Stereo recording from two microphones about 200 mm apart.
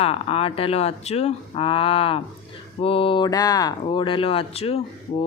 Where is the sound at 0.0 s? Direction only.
30° left (ahead or behind).